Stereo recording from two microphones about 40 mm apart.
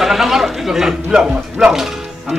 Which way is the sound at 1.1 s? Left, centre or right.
Centre.